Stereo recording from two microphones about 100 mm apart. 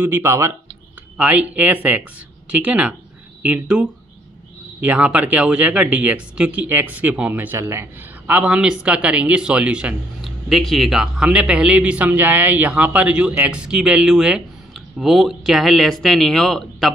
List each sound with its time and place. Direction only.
0.0 s speech: 20° right (ahead or behind)
1.1 s speech: 15° right (ahead or behind); by 16.9 s 5° left (ahead or behind)